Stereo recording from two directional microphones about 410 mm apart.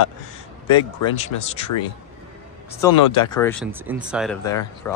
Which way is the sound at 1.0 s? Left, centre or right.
Left.